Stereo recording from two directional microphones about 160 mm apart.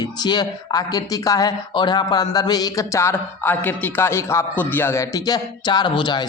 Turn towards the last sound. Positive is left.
turn(degrees=30)  # may be behind; listen again after turning